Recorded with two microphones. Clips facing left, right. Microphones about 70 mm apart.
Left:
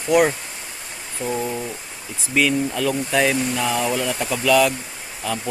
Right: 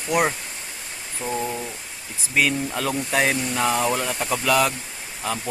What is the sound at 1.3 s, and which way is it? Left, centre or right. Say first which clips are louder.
Speech: left 2 dB; centre.